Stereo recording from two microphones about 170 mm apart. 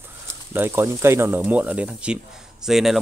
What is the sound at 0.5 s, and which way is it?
A man's voice, 15° right (ahead or behind).